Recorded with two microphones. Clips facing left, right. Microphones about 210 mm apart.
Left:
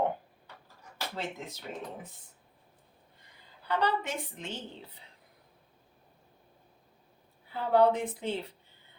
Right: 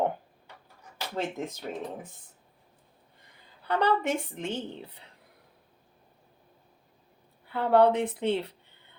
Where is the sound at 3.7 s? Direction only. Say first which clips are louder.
Right 5 dB; 55° right (ahead or behind).